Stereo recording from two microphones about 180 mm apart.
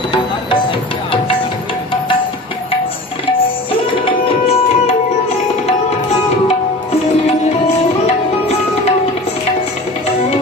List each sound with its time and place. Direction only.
3.7 s music: 30° left (ahead or behind)
8.0 s tabla: 35° left (ahead or behind)